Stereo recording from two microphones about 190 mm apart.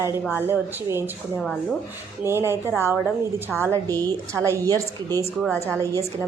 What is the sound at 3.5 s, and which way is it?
Speech, centre (ahead or behind).